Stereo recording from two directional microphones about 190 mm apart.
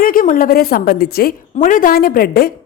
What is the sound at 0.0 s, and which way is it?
A woman's voice, 45° left (ahead or behind).